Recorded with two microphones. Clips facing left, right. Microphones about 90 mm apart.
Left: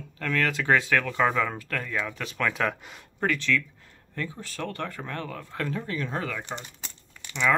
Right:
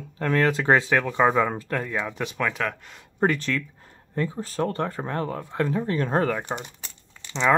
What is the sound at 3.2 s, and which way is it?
Speech, 40° right (ahead or behind).